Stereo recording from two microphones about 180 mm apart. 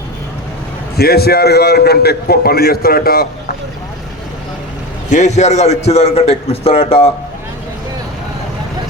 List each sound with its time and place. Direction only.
0.9 s a man's voice: 60° left (ahead or behind)
5.1 s a man's voice: 40° left (ahead or behind)